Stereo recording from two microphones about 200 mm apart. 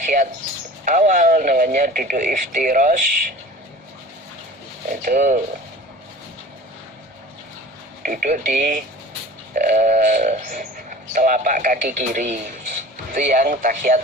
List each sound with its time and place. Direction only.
0.0 s speech: 40° right (ahead or behind)
4.9 s speech: 40° right (ahead or behind)
8.0 s speech: 40° right (ahead or behind)